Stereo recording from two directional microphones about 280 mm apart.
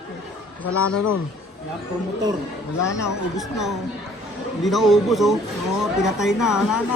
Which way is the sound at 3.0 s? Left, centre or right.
Centre.